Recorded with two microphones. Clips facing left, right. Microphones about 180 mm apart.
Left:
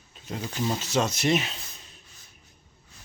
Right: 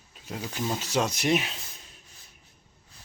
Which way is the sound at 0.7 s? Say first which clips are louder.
Left 1 dB; 10° right (ahead or behind).